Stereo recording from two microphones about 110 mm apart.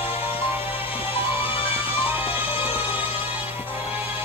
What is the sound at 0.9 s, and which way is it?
Music, 60° left (ahead or behind).